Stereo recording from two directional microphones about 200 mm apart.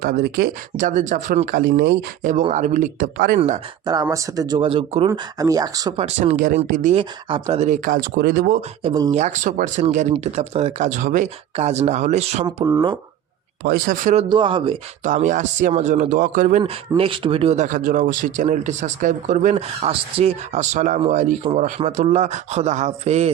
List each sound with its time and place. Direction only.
0.0 s speech: 50° right (ahead or behind)
2.2 s speech: 35° right (ahead or behind)
4.0 s speech: 15° right (ahead or behind)
5.0 s speech: 20° right (ahead or behind)
6.3 s speech: 50° right (ahead or behind)
6.9 s speech: 25° right (ahead or behind); by 8.5 s 45° right (ahead or behind)
8.8 s speech: 20° right (ahead or behind)
9.1 s speech: 35° right (ahead or behind)
12.5 s speech: 15° right (ahead or behind)
13.7 s speech: 40° right (ahead or behind)
14.3 s speech: 25° right (ahead or behind)
15.0 s speech: 40° right (ahead or behind)